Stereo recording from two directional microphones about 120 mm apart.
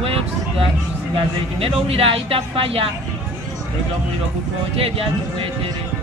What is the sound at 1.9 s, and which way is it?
Speech, 50° right (ahead or behind).